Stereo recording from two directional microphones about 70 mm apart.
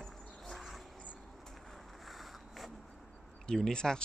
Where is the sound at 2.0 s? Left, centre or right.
Centre.